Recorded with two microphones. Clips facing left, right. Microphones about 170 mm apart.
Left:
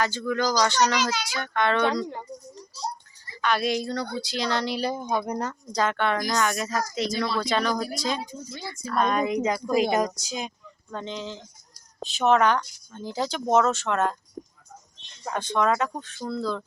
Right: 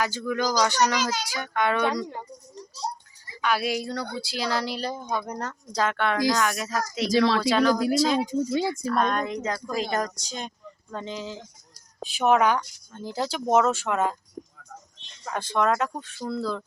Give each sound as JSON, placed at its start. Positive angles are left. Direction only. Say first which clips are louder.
{"t": 0.0, "sound": "speech", "louder": "left 1 dB", "side_deg": -10}
{"t": 3.4, "sound": "speech", "louder": "left 1 dB", "side_deg": -5}
{"t": 7.1, "sound": "speech", "louder": "right 10 dB", "side_deg": -90}
{"t": 7.4, "sound": "speech", "louder": "right 5 dB", "side_deg": -5}
{"t": 8.2, "sound": "speech", "louder": "right 13 dB", "side_deg": -90}
{"t": 8.6, "sound": "speech", "louder": "right 2 dB", "side_deg": 0}
{"t": 10.9, "sound": "speech", "louder": "even", "side_deg": -5}
{"t": 15.3, "sound": "speech", "louder": "even", "side_deg": -5}